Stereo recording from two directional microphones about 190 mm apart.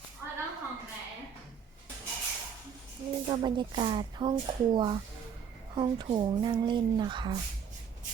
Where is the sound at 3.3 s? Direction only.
25° right (ahead or behind).